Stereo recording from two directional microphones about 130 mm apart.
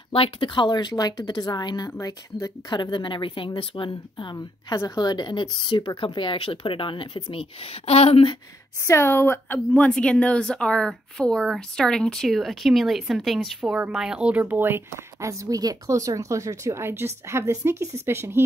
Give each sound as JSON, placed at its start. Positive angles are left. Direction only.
{"t": 0.1, "sound": "speech", "side_deg": 45}
{"t": 8.8, "sound": "a woman's voice", "side_deg": 20}